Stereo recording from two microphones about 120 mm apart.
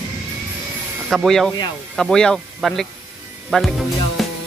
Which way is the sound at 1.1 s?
Centre (ahead or behind).